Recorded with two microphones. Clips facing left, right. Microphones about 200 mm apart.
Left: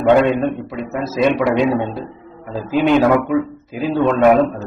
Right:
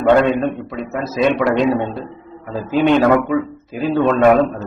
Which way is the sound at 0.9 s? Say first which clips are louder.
Even; centre (ahead or behind).